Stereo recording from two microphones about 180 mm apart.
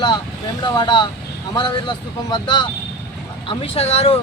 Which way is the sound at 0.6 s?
25° left (ahead or behind).